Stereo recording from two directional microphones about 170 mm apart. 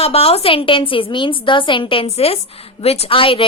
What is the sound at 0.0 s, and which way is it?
A woman's voice, 35° left (ahead or behind).